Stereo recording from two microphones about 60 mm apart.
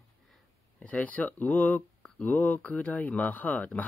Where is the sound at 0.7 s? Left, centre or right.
Left.